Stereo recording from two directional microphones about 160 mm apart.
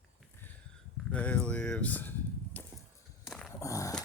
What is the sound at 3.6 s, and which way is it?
Dog, 20° left (ahead or behind).